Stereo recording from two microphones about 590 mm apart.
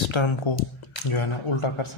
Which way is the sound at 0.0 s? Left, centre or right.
Left.